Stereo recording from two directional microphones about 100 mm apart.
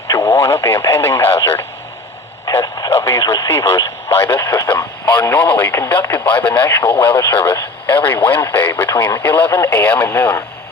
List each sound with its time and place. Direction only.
0.1 s speech: 30° left (ahead or behind)
2.5 s radio: 35° left (ahead or behind)
2.9 s speech: 30° left (ahead or behind)
5.0 s speech: 20° left (ahead or behind)